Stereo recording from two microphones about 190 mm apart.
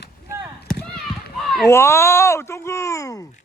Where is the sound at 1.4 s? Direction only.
Centre (ahead or behind).